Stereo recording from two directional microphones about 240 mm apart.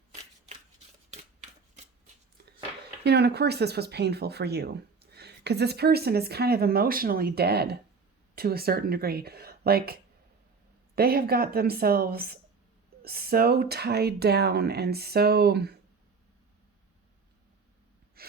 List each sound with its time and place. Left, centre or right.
3.0 s speech: right
18.2 s gasp: right